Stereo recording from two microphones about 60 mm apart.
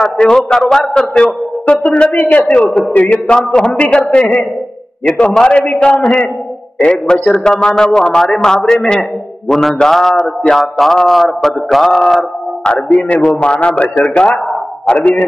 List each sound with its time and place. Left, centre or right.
0.0 s a man's voice: centre
12.8 s a man's voice: left
13.4 s a man's voice: centre